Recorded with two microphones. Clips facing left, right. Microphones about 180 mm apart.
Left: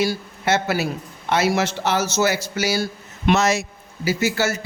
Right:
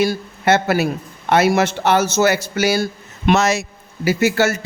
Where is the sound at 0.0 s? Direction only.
55° right (ahead or behind).